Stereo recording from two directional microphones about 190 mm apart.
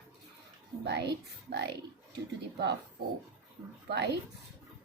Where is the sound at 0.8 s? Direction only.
65° right (ahead or behind).